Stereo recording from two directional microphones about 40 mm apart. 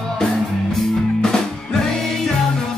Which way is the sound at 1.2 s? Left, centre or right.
Centre.